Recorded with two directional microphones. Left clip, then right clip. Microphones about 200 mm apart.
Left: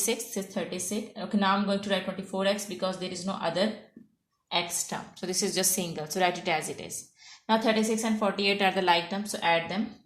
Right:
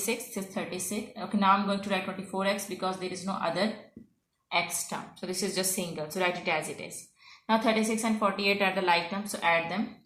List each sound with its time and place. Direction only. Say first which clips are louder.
0.0 s a woman's voice: left 2 dB; 50° left (ahead or behind)
4.5 s a woman's voice: even; 50° left (ahead or behind)